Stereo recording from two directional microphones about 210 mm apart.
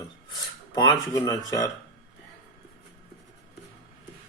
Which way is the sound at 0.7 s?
15° left (ahead or behind).